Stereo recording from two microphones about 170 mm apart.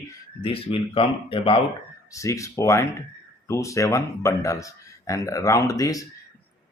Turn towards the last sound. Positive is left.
turn(degrees=20)  # may be behind; listen again after turning